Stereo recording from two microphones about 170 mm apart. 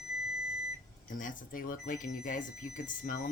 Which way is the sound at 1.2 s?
55° left (ahead or behind).